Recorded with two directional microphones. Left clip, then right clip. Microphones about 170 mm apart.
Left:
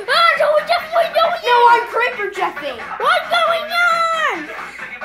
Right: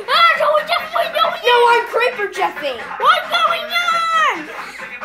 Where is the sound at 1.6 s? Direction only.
45° right (ahead or behind).